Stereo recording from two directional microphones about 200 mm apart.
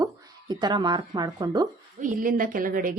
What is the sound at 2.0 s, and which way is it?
Speech, 45° right (ahead or behind).